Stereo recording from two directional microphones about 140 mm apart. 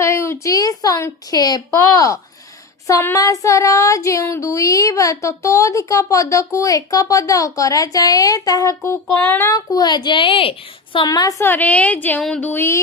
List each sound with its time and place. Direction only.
0.0 s child singing: 20° left (ahead or behind)
9.5 s a woman's voice: 25° left (ahead or behind)